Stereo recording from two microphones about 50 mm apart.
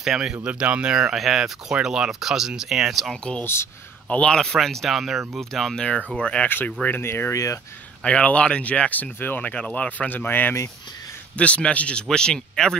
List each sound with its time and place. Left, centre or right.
0.0 s speech: centre
0.4 s speech: right
1.1 s speech: centre
4.3 s speech: centre
4.8 s speech: centre
5.4 s speech: centre
6.4 s speech: left
7.0 s speech: left
7.3 s speech: left
8.0 s speech: left
11.3 s speech: left